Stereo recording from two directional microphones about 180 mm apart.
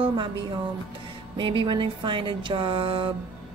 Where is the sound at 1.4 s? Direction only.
25° right (ahead or behind).